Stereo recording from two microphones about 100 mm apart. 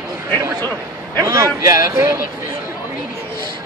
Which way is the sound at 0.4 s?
35° right (ahead or behind).